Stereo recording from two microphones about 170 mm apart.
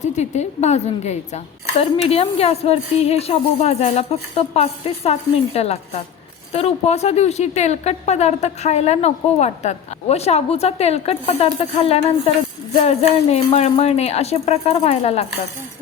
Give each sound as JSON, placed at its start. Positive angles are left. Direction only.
{"t": 0.0, "sound": "speech", "side_deg": 40}